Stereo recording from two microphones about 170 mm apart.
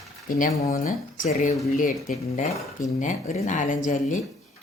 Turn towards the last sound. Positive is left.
turn(degrees=50)  # may be behind; listen again after turning